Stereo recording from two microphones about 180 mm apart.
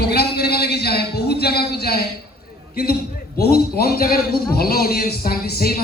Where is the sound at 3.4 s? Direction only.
60° left (ahead or behind).